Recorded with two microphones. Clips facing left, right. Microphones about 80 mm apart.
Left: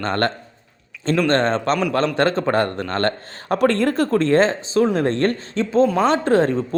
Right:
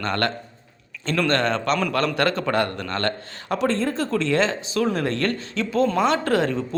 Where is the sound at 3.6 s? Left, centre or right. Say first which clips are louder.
Left 5 dB; left.